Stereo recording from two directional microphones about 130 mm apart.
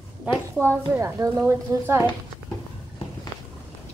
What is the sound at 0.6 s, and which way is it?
A woman's voice, 20° right (ahead or behind).